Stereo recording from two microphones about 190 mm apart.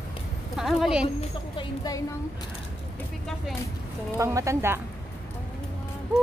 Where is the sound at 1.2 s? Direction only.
20° left (ahead or behind).